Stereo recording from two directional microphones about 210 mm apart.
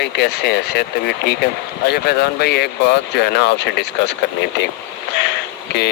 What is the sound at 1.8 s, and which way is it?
Speech, 50° left (ahead or behind).